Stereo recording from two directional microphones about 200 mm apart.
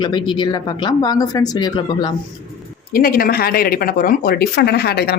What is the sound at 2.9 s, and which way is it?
Speech, 45° left (ahead or behind).